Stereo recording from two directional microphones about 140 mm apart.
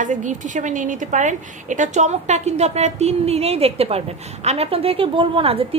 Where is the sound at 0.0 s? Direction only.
65° right (ahead or behind).